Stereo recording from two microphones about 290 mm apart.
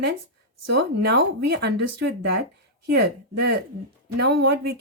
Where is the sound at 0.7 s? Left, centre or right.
Right.